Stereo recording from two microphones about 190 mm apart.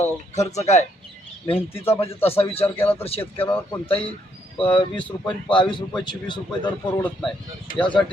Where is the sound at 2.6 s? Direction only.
10° left (ahead or behind).